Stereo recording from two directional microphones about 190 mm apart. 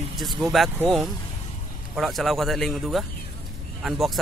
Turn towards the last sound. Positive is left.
turn(degrees=0)  # may be behind; listen again after turning